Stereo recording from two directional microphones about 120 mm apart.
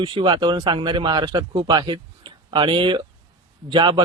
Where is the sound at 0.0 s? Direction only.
45° right (ahead or behind).